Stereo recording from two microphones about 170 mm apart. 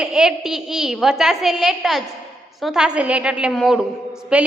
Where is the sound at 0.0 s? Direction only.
5° right (ahead or behind).